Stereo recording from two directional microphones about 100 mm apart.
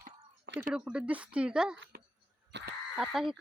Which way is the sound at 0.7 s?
10° right (ahead or behind).